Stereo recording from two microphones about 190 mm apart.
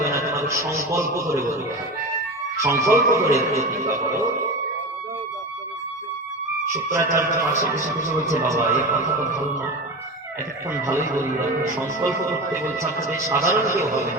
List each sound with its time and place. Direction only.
0.0 s a man's voice: 15° right (ahead or behind)
2.6 s speech: 15° right (ahead or behind)
6.7 s speech: 15° right (ahead or behind)
10.7 s speech: 15° right (ahead or behind)